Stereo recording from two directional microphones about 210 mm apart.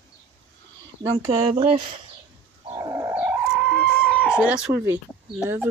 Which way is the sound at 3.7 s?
5° left (ahead or behind).